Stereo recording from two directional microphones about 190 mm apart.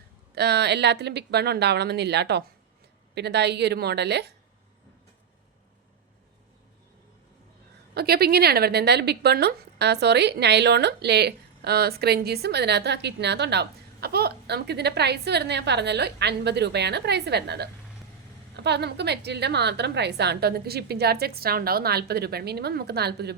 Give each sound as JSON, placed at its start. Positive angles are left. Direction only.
{"t": 0.3, "sound": "speech", "side_deg": -60}
{"t": 7.9, "sound": "speech", "side_deg": -55}